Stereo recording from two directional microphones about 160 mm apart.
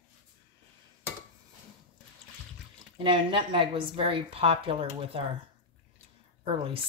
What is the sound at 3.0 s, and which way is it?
A woman's voice, 30° right (ahead or behind).